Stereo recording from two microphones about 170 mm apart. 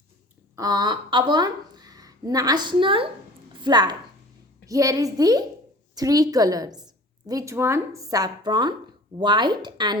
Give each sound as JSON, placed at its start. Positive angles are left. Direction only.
{"t": 0.5, "sound": "a woman's voice", "side_deg": -20}